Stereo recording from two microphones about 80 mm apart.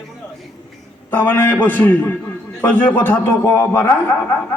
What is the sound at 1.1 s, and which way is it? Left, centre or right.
A man's voice, left.